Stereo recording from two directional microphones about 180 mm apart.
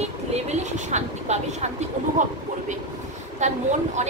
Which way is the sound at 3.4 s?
40° right (ahead or behind).